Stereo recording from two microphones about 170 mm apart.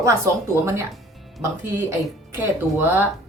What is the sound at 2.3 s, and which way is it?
Speech, 10° right (ahead or behind).